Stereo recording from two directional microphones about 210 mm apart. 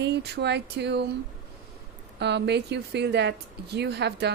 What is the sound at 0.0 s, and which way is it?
Speech, 50° right (ahead or behind).